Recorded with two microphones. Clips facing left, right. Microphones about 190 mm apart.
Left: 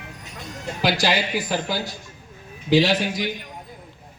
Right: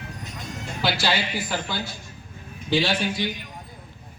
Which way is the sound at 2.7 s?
15° left (ahead or behind).